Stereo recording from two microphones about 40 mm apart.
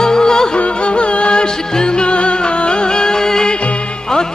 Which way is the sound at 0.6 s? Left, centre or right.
Left.